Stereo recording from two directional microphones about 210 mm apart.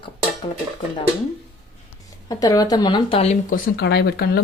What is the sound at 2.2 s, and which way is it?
Speech, 20° left (ahead or behind).